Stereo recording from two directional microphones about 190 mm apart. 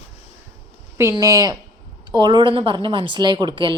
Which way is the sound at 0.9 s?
15° right (ahead or behind).